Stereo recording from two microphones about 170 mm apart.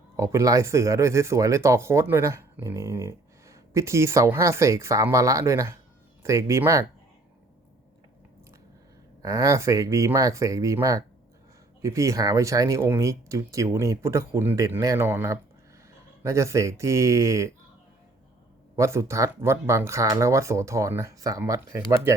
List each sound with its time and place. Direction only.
0.2 s speech: 20° right (ahead or behind)
9.2 s speech: 20° right (ahead or behind)
18.8 s speech: 15° right (ahead or behind)